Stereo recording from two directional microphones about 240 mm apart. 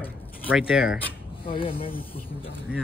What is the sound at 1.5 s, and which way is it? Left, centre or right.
Speech, left.